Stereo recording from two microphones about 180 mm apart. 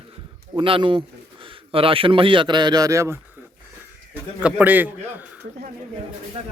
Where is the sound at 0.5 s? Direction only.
30° right (ahead or behind).